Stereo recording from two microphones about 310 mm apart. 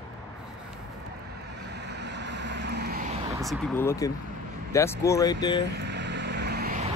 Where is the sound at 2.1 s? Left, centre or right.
Right.